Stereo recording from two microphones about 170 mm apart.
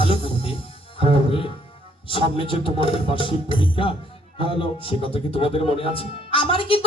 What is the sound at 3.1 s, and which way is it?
Speech, 30° left (ahead or behind).